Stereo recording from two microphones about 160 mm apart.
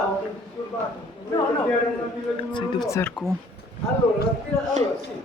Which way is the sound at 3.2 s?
5° right (ahead or behind).